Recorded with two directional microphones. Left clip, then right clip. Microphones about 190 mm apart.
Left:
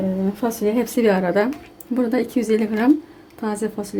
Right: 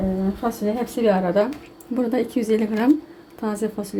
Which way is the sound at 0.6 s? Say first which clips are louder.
Left 4 dB; 35° left (ahead or behind).